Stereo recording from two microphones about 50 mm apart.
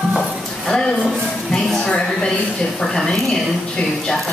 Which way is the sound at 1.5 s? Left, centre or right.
Centre.